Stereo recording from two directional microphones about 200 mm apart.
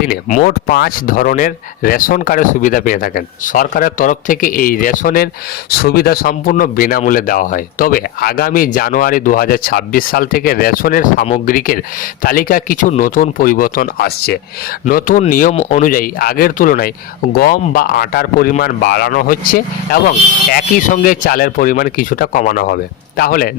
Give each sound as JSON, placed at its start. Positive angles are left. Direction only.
{"t": 0.1, "sound": "speech", "side_deg": 45}